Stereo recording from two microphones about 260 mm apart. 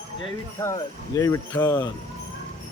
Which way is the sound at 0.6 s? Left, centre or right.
Centre.